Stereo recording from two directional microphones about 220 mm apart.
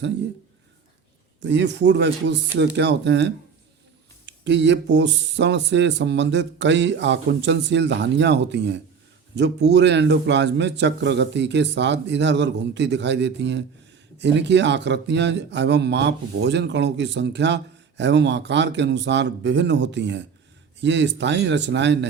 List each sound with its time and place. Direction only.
1.4 s a man's voice: 55° right (ahead or behind)